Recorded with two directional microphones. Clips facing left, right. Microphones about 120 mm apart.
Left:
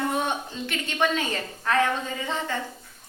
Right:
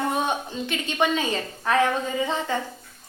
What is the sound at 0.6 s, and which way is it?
A woman's voice, 15° right (ahead or behind).